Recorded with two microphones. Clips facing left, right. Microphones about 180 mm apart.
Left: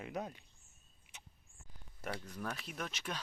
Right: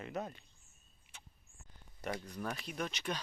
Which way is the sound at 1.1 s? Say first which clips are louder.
Even; 15° left (ahead or behind).